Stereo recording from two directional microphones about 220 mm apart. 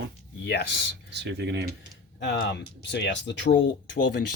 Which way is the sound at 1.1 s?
50° right (ahead or behind).